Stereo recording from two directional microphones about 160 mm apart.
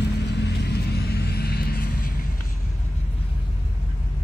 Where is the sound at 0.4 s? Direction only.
90° left; by 2.1 s 70° left (ahead or behind).